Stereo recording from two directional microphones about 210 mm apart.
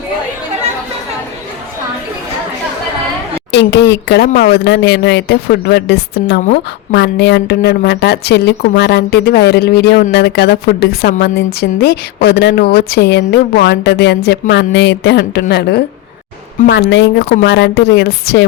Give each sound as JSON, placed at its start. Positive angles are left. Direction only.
{"t": 3.5, "sound": "a woman's voice", "side_deg": 55}